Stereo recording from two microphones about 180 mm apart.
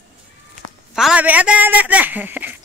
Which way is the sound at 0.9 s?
5° right (ahead or behind).